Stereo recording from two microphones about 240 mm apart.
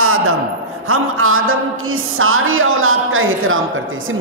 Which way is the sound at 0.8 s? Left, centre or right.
Right.